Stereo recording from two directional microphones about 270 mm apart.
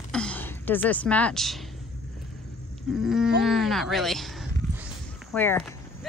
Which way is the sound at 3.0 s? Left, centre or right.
Centre.